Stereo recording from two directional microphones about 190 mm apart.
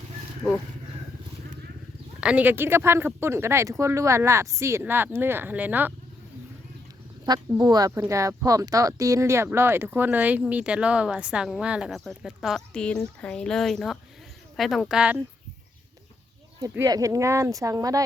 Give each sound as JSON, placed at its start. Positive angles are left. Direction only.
{"t": 2.2, "sound": "speech", "side_deg": -10}
{"t": 7.3, "sound": "speech", "side_deg": -20}
{"t": 16.6, "sound": "speech", "side_deg": -15}